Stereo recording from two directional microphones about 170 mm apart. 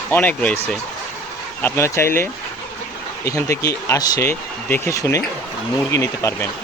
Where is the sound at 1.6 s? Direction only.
15° left (ahead or behind).